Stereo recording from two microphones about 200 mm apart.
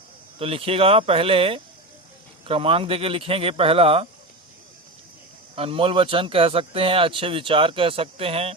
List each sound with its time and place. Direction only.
0.3 s speech: 30° right (ahead or behind)
5.5 s speech: 30° right (ahead or behind)